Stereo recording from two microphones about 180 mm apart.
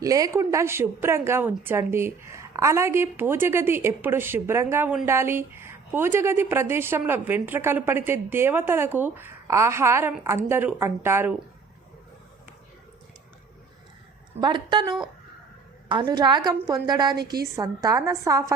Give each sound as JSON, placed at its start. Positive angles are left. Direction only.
{"t": 0.0, "sound": "a woman's voice", "side_deg": -20}
{"t": 14.4, "sound": "a woman's voice", "side_deg": -25}